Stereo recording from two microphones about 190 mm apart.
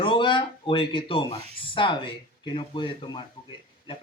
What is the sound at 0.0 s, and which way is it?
Speech, 25° left (ahead or behind).